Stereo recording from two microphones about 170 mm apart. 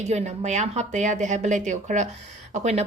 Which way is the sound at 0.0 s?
40° right (ahead or behind).